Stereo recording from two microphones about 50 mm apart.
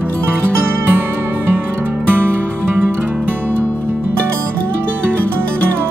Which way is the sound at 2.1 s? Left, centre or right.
Right.